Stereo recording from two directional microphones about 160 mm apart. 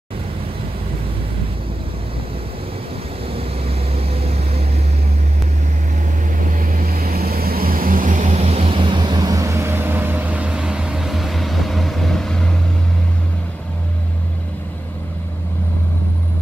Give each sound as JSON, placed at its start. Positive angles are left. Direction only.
{"t": 3.3, "sound": "vehicle", "side_deg": -40}
{"t": 6.6, "sound": "vehicle", "side_deg": -65}